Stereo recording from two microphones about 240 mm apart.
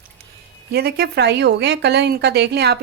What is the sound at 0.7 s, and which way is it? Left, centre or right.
A woman's voice, right.